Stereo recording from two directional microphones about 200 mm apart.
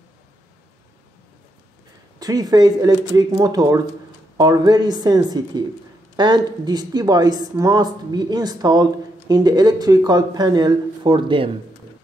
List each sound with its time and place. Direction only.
2.1 s a woman's voice: 20° right (ahead or behind)